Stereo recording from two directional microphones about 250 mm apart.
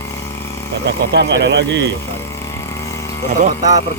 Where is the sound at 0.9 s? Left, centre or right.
Right.